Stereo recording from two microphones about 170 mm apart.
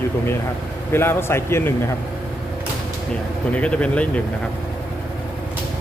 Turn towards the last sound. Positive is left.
turn(degrees=5)  # may be behind; listen again after turning